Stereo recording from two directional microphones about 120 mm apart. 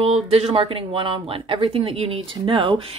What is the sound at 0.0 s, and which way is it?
Speech, 55° right (ahead or behind).